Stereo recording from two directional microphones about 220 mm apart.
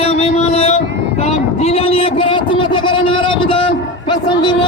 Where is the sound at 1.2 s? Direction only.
30° left (ahead or behind).